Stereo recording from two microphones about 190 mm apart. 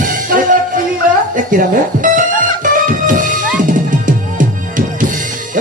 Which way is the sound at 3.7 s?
45° right (ahead or behind).